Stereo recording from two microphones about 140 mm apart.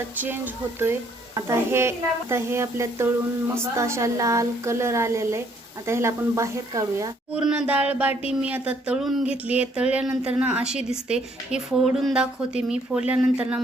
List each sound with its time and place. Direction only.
0.2 s speech: 15° right (ahead or behind)
7.3 s speech: 5° right (ahead or behind)